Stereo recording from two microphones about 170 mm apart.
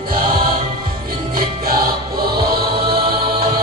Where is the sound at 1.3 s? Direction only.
60° right (ahead or behind).